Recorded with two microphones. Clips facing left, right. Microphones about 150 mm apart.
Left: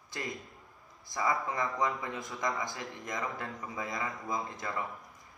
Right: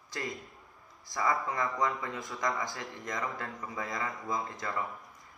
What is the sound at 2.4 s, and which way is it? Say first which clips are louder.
Speech: right 1 dB; 20° left (ahead or behind).